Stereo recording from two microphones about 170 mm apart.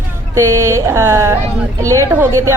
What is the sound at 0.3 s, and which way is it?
A woman's voice, 15° right (ahead or behind).